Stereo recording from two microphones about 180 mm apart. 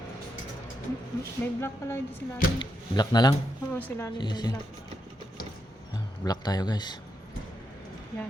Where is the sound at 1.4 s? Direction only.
15° left (ahead or behind).